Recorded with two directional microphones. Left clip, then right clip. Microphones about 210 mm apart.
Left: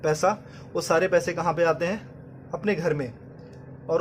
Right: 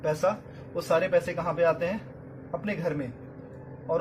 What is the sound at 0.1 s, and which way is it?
A man's voice, 50° left (ahead or behind).